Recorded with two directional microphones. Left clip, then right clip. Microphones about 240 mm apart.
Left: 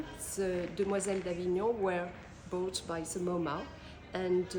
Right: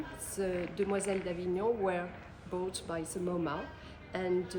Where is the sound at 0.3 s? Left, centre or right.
Centre.